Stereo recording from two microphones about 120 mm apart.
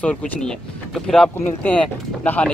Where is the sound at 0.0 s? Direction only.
10° left (ahead or behind).